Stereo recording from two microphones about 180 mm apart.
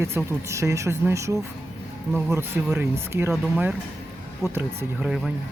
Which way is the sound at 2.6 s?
10° right (ahead or behind).